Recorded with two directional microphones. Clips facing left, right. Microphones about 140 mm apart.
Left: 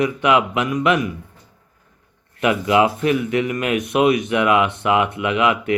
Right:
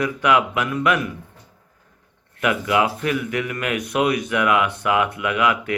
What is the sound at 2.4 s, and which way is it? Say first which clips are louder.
Speech: left 4 dB; 25° left (ahead or behind).